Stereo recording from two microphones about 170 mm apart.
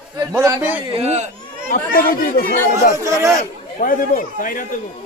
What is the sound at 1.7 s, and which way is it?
Speech, 60° left (ahead or behind).